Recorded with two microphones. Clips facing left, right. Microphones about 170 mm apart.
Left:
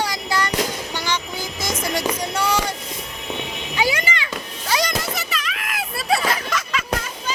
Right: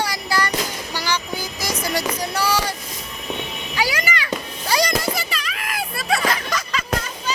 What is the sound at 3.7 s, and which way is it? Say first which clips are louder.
Music: left 1 dB; 20° left (ahead or behind).